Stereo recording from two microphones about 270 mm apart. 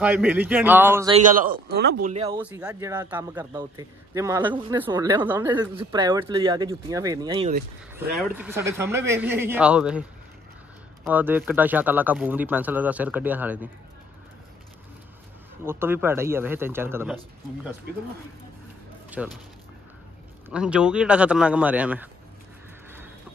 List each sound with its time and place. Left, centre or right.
0.0 s speech: centre
1.1 s speech: right
2.4 s speech: centre
11.1 s speech: centre
15.6 s speech: centre
19.0 s speech: centre
20.4 s a man's voice: centre